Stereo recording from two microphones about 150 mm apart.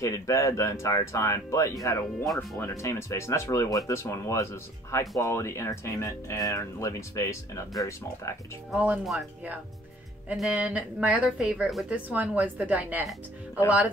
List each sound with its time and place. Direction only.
0.0 s speech: 20° left (ahead or behind)
8.7 s a woman's voice: 10° right (ahead or behind)
10.3 s a woman's voice: 5° right (ahead or behind)